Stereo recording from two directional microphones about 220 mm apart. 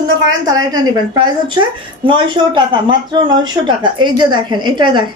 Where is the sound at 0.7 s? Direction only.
20° right (ahead or behind).